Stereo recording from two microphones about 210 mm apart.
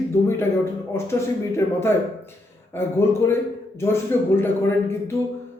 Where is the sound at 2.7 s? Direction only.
10° left (ahead or behind).